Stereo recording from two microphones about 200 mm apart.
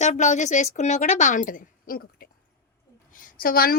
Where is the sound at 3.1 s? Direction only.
45° left (ahead or behind).